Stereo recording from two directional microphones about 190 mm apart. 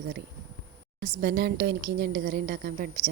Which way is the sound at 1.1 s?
60° right (ahead or behind).